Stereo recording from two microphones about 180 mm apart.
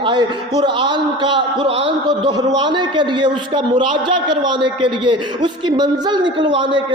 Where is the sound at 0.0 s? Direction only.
25° right (ahead or behind).